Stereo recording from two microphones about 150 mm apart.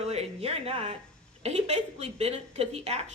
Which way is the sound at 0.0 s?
45° right (ahead or behind).